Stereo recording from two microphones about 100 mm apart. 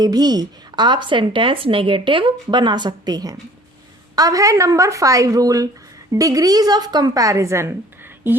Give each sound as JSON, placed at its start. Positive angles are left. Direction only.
{"t": 0.0, "sound": "a woman's voice", "side_deg": -40}